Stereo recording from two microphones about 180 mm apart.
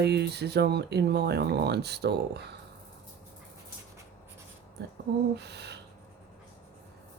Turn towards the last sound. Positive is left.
turn(degrees=-70)  # may be behind; listen again after turning